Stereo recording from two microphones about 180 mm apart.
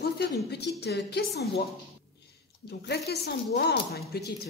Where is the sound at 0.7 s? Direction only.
65° left (ahead or behind).